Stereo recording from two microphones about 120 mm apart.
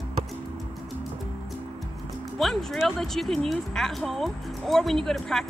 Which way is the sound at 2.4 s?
5° left (ahead or behind).